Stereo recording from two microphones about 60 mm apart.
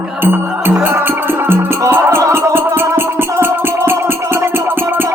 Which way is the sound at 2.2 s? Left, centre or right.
Right.